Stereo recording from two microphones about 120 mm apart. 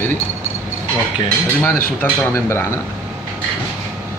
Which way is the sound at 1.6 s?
15° left (ahead or behind).